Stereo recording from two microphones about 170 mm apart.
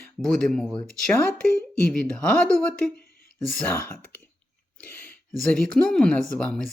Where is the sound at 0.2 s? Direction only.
5° left (ahead or behind).